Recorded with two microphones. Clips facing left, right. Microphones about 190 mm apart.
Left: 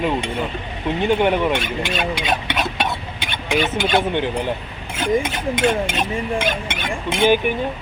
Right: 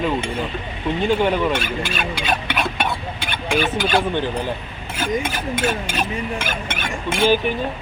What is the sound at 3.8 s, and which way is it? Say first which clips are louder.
Speech: left 1 dB; 20° left (ahead or behind).